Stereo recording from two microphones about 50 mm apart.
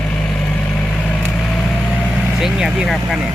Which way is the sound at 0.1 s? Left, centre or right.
Left.